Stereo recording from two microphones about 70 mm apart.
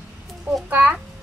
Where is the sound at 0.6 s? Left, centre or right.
Right.